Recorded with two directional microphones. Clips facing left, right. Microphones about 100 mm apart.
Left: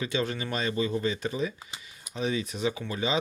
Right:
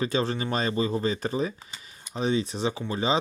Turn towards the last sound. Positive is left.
turn(degrees=-30)  # may be behind; listen again after turning